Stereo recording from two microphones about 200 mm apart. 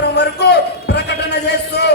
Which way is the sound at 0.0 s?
55° left (ahead or behind).